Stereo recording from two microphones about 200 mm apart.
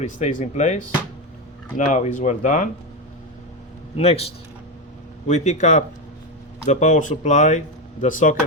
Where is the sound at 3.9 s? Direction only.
30° left (ahead or behind).